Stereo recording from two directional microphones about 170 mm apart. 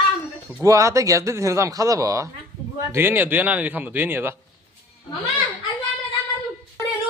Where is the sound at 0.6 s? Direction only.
20° right (ahead or behind).